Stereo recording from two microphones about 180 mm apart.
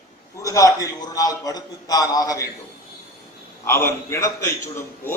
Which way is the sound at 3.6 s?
15° left (ahead or behind).